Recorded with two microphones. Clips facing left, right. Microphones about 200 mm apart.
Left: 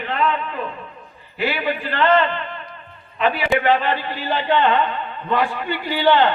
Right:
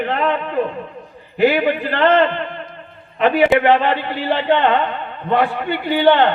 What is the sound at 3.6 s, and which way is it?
A man's voice, 65° right (ahead or behind).